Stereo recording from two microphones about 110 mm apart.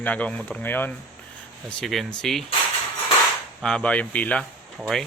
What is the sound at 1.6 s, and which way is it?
Speech, centre (ahead or behind).